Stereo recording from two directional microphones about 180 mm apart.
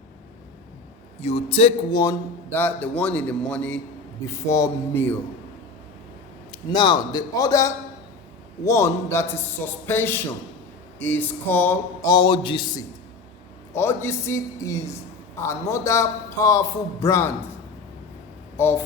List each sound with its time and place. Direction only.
1.2 s a man's voice: 35° left (ahead or behind)
1.9 s a sound: 20° left (ahead or behind)
2.5 s a man's voice: 10° left (ahead or behind)
4.3 s a man's voice: 15° left (ahead or behind)
6.5 s a sound: 25° left (ahead or behind)
8.6 s a man's voice: 15° left (ahead or behind)
11.0 s a sound: 10° left (ahead or behind)
13.7 s a man's voice: 15° left (ahead or behind)
18.5 s speech: 15° left (ahead or behind)